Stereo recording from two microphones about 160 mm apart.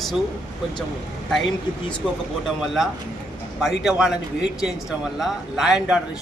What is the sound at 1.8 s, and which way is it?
A man's voice, 5° left (ahead or behind).